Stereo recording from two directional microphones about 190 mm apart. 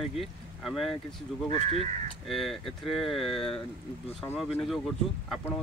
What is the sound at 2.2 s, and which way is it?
Speech, centre (ahead or behind).